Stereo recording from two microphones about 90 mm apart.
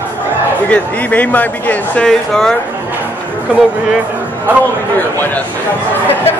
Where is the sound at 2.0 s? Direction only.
5° left (ahead or behind).